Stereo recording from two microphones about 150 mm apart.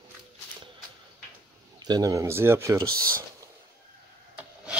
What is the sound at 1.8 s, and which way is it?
Speech, 30° right (ahead or behind).